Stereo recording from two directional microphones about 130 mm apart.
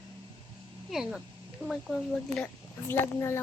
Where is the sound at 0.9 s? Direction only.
5° right (ahead or behind).